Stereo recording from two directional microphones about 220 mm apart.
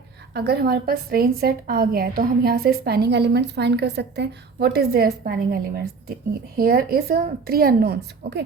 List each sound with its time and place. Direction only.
0.3 s a woman's voice: 45° right (ahead or behind)